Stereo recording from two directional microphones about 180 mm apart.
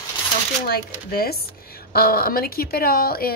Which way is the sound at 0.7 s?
55° left (ahead or behind).